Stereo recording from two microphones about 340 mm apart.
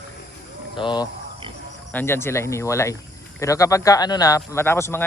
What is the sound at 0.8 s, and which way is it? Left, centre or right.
A man's voice, centre.